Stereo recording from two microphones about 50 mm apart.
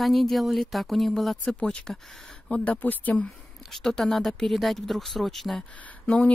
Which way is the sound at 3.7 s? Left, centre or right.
Centre.